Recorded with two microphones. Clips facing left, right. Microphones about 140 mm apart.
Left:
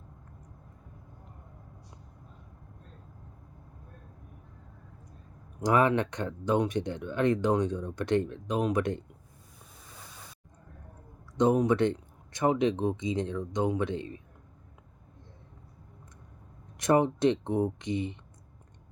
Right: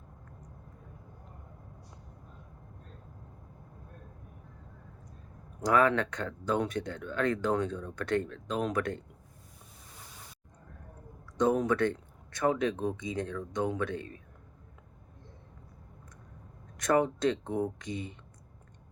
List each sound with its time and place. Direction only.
5.5 s speech: 20° left (ahead or behind)
11.3 s speech: 20° left (ahead or behind)
16.7 s speech: 20° left (ahead or behind)